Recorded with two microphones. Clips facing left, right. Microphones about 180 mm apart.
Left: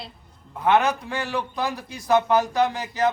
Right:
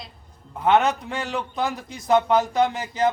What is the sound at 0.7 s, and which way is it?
A man's voice, 20° right (ahead or behind).